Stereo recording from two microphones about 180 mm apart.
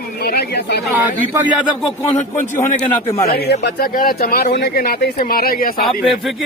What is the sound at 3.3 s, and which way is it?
Speech, 65° left (ahead or behind).